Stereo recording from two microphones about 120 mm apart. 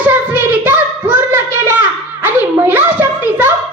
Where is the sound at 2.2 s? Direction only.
15° right (ahead or behind).